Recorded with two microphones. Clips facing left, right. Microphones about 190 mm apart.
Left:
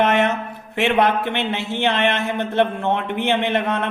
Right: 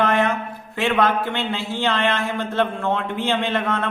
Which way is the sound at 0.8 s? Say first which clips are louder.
Left 2 dB; 20° left (ahead or behind).